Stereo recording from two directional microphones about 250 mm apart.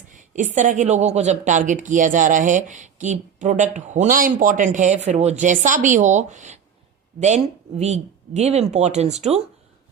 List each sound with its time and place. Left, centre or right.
0.1 s speech: right